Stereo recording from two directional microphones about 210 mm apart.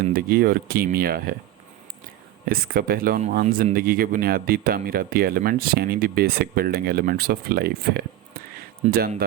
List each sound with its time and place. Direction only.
0.1 s speech: 45° right (ahead or behind)
2.5 s speech: 45° right (ahead or behind)